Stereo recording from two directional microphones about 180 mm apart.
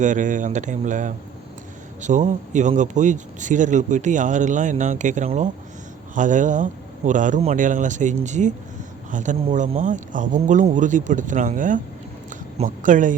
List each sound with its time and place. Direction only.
0.0 s speech: 45° right (ahead or behind)